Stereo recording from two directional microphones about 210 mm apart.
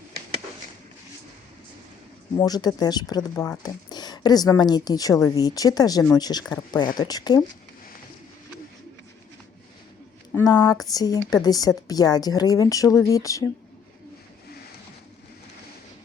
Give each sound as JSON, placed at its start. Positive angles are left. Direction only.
{"t": 2.4, "sound": "speech", "side_deg": 20}
{"t": 10.3, "sound": "speech", "side_deg": 20}